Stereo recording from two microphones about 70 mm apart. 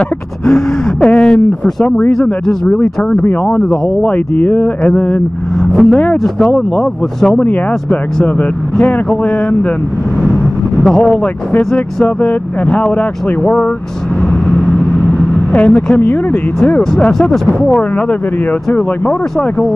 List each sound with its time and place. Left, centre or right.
0.5 s speech: centre
3.3 s speech: left
5.6 s vehicle: centre
6.2 s speech: centre
7.3 s speech: left
10.8 s speech: centre
14.7 s vehicle: centre
16.5 s speech: centre